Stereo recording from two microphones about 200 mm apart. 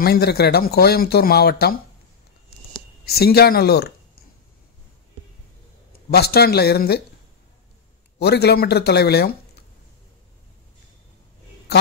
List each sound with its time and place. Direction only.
0.0 s speech: 50° left (ahead or behind)
3.1 s speech: 50° left (ahead or behind)
6.1 s speech: 50° left (ahead or behind)
8.2 s speech: 55° left (ahead or behind)